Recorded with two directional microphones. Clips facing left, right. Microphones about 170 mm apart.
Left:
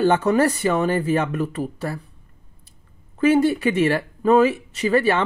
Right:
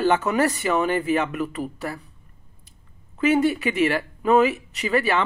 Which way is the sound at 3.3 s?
30° left (ahead or behind).